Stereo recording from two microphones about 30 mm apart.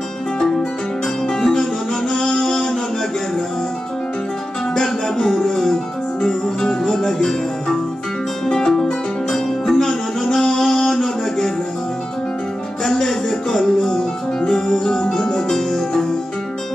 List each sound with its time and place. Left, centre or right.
0.4 s music: left
4.7 s music: centre
8.5 s music: left
9.3 s music: centre
12.8 s music: centre
15.4 s music: centre